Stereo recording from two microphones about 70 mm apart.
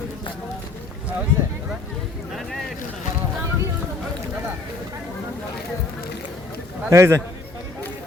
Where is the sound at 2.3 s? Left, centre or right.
Centre.